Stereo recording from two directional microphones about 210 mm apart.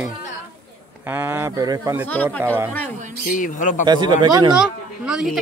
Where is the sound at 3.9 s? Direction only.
20° right (ahead or behind).